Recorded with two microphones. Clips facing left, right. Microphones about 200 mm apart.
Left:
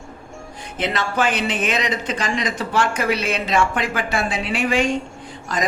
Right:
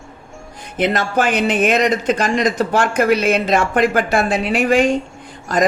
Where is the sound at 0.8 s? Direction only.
50° right (ahead or behind).